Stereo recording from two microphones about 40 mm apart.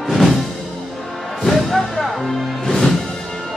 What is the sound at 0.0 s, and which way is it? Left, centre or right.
Music, centre.